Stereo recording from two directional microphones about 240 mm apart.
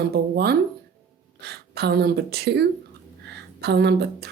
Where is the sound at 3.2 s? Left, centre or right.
Right.